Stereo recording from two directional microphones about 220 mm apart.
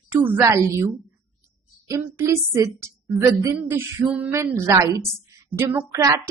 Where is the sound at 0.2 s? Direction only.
15° right (ahead or behind).